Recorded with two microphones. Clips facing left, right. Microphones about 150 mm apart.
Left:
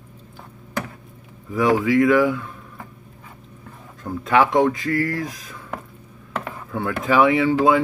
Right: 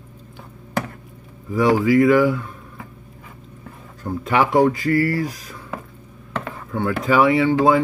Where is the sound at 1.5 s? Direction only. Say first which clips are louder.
Right 2 dB; centre (ahead or behind).